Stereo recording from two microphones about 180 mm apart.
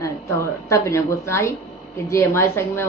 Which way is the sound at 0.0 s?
15° left (ahead or behind).